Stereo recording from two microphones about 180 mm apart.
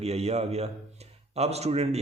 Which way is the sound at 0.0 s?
35° right (ahead or behind).